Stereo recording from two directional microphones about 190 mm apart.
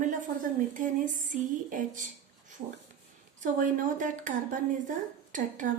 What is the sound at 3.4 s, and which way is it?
Speech, 40° right (ahead or behind).